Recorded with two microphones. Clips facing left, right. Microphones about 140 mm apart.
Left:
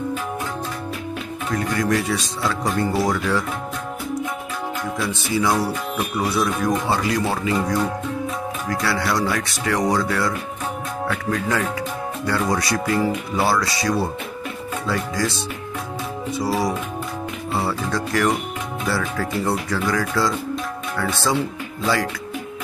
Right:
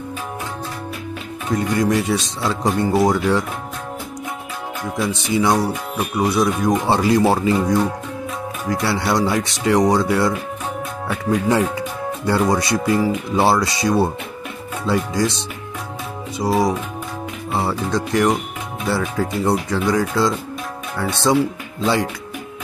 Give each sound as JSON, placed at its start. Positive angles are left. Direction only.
{"t": 1.5, "sound": "speech", "side_deg": -20}
{"t": 4.9, "sound": "speech", "side_deg": -20}
{"t": 6.9, "sound": "speech", "side_deg": -30}
{"t": 8.6, "sound": "speech", "side_deg": -25}